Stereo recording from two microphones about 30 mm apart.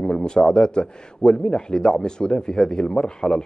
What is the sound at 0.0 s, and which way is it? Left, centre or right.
A man's voice, left.